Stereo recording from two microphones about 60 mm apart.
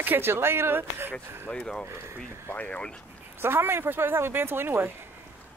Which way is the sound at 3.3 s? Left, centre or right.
Right.